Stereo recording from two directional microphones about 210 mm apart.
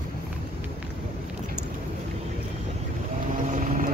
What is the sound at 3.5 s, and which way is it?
Vehicle, 40° right (ahead or behind).